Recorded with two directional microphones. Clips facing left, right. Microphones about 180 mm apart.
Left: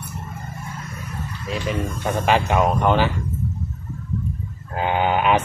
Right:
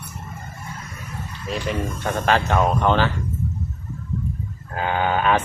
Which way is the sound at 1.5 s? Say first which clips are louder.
Even; centre (ahead or behind).